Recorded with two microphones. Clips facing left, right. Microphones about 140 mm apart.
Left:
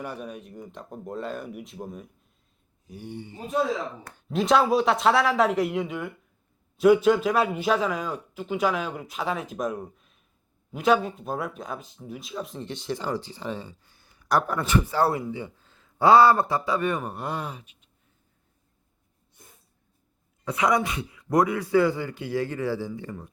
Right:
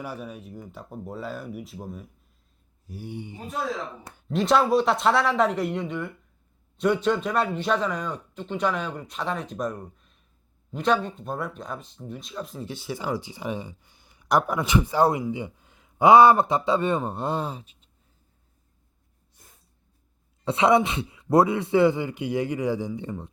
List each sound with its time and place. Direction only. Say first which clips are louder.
0.0 s a man's voice: even; 5° right (ahead or behind)
4.3 s a man's voice: even; centre (ahead or behind); by 17.8 s 30° right (ahead or behind)
20.4 s speech: right 4 dB; 25° right (ahead or behind)